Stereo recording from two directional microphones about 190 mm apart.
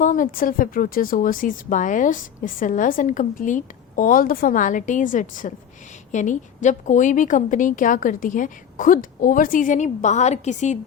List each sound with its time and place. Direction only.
0.0 s a woman's voice: 45° left (ahead or behind)